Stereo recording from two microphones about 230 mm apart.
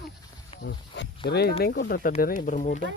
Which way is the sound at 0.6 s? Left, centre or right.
Left.